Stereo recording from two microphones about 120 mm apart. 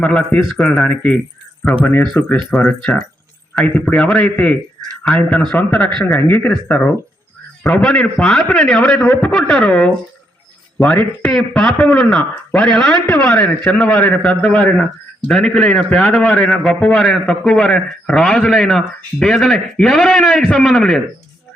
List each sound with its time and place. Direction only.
0.0 s speech: 10° left (ahead or behind)
7.8 s a man's voice: 5° left (ahead or behind)